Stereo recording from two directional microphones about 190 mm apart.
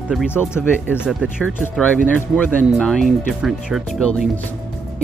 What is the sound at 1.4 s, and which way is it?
Speech, 5° left (ahead or behind).